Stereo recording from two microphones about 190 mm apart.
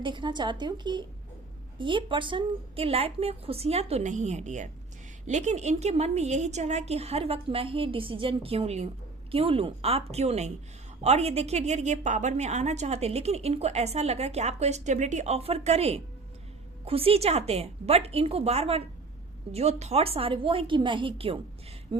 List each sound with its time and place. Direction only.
0.0 s a woman's voice: 25° right (ahead or behind)